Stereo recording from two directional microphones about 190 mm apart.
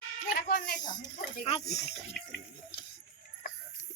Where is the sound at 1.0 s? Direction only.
25° left (ahead or behind).